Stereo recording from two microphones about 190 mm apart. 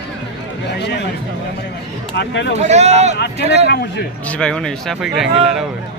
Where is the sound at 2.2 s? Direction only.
65° left (ahead or behind).